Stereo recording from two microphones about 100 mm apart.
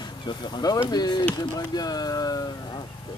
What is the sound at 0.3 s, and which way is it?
Speech, 45° left (ahead or behind).